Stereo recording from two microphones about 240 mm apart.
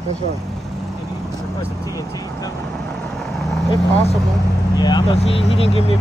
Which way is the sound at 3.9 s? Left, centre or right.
Left.